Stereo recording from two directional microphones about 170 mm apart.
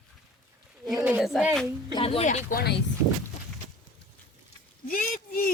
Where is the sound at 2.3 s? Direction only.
50° left (ahead or behind).